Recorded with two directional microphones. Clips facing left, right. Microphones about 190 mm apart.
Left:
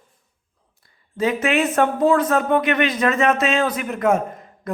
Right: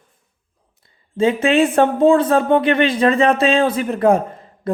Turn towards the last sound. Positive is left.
turn(degrees=-30)  # may be behind; listen again after turning